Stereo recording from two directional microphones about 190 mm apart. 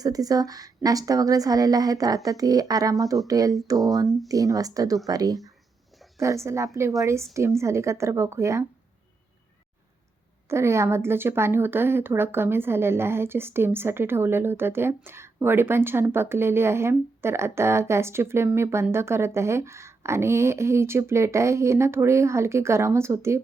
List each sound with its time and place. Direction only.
0.0 s a woman's voice: 20° right (ahead or behind)
10.5 s speech: 15° right (ahead or behind)